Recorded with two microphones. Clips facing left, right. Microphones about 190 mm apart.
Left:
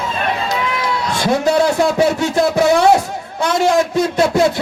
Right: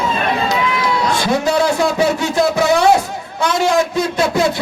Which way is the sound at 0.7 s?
55° left (ahead or behind).